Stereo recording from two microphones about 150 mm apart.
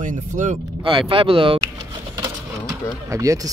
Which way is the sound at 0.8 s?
35° right (ahead or behind).